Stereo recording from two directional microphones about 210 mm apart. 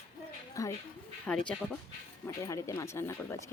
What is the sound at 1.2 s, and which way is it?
Speech, 5° left (ahead or behind).